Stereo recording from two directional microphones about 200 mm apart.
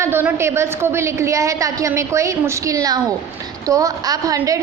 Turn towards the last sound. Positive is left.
turn(degrees=-15)  # may be behind; listen again after turning